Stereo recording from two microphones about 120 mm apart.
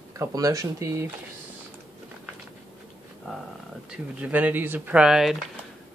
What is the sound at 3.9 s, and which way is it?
Speech, 10° right (ahead or behind).